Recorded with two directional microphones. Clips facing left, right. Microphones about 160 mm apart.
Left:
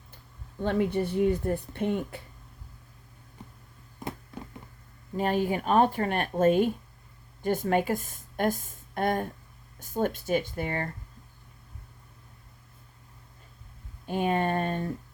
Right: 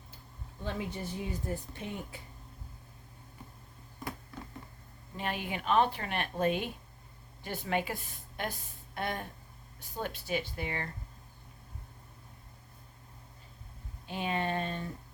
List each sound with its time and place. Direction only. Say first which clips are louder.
0.6 s speech: left 11 dB; 60° left (ahead or behind)
5.1 s a woman's voice: left 10 dB; 40° left (ahead or behind)
14.1 s speech: left 7 dB; 50° left (ahead or behind)